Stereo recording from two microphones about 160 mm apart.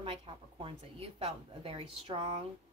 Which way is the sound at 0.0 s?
35° right (ahead or behind).